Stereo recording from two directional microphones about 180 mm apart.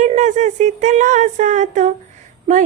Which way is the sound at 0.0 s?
40° right (ahead or behind).